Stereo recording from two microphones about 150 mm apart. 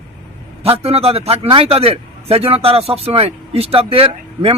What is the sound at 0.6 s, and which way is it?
A man's voice, 40° right (ahead or behind).